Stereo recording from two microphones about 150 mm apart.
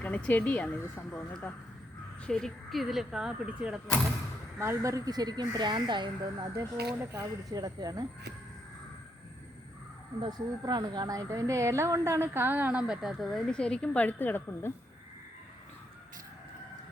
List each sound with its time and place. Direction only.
0.0 s speech: 10° left (ahead or behind); by 8.0 s 25° right (ahead or behind)
10.2 s a woman's voice: 30° right (ahead or behind); by 14.7 s 15° left (ahead or behind)